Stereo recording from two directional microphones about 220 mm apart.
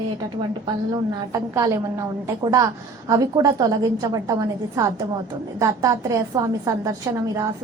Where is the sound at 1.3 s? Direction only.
15° right (ahead or behind).